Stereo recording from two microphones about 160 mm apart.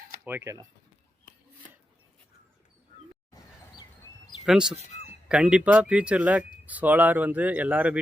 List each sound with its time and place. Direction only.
0.3 s speech: 15° right (ahead or behind)
4.4 s speech: 5° right (ahead or behind)
4.8 s fowl: 45° left (ahead or behind)
5.3 s speech: 5° right (ahead or behind)